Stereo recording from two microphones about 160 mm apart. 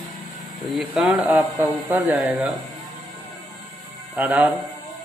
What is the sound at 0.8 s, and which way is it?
A man's voice, 5° right (ahead or behind).